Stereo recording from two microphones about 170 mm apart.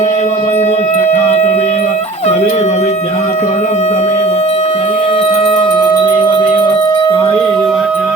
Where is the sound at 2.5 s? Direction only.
45° left (ahead or behind); by 7.1 s 25° left (ahead or behind).